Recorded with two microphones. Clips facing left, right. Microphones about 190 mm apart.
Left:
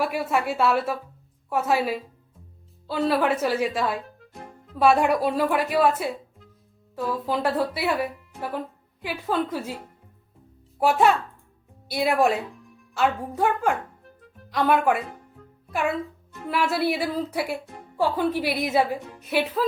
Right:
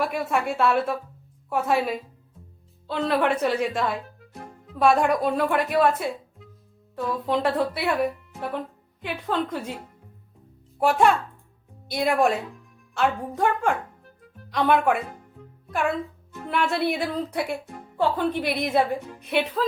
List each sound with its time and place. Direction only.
0.0 s a woman's voice: 5° left (ahead or behind)
10.8 s a child's voice: centre (ahead or behind)